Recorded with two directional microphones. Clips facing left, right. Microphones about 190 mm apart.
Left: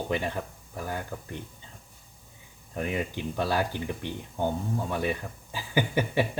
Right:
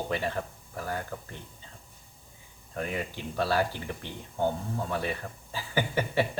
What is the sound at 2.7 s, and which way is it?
A man's voice, 15° left (ahead or behind).